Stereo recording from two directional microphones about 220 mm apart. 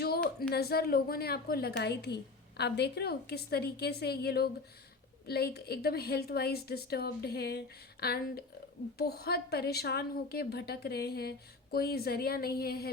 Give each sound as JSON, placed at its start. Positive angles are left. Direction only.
{"t": 0.5, "sound": "a woman's voice", "side_deg": 45}